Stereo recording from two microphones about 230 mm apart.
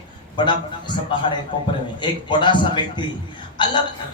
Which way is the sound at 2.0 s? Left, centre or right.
Centre.